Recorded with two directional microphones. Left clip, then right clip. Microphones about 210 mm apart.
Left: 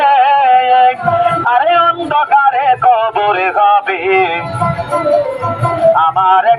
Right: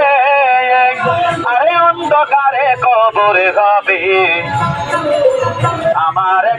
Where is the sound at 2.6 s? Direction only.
40° left (ahead or behind).